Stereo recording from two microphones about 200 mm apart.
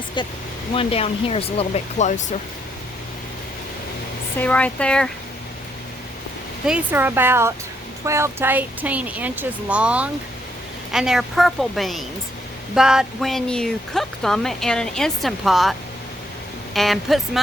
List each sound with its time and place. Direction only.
0.2 s speech: 20° left (ahead or behind)
4.4 s speech: 5° left (ahead or behind)
6.7 s speech: 10° right (ahead or behind)
16.7 s speech: centre (ahead or behind)